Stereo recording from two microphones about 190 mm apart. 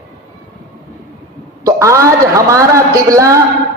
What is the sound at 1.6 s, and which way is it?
A man's voice, 15° right (ahead or behind).